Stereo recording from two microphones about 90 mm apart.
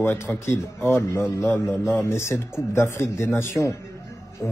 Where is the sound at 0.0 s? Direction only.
25° left (ahead or behind).